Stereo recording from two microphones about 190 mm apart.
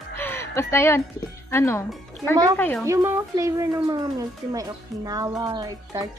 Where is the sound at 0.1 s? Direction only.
10° left (ahead or behind).